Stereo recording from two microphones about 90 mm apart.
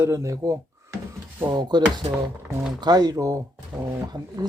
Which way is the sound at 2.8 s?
50° right (ahead or behind).